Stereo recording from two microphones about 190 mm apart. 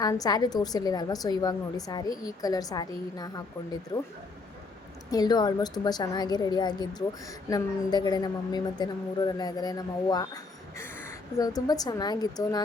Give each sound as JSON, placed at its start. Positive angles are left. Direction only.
{"t": 0.0, "sound": "a woman's voice", "side_deg": 20}
{"t": 5.1, "sound": "a woman's voice", "side_deg": 20}